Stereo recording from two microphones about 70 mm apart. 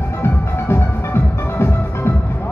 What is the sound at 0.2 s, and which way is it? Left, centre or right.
Music, left.